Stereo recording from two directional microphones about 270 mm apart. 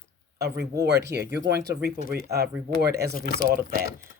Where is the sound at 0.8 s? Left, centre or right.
Right.